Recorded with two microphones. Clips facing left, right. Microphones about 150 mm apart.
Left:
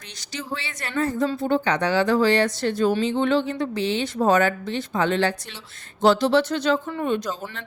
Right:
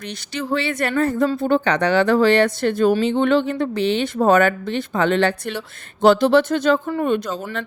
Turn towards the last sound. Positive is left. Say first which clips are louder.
# right 4 dB
turn(degrees=-60)  # may be behind; listen again after turning